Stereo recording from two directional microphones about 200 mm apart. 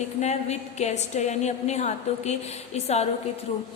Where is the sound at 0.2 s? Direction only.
35° left (ahead or behind).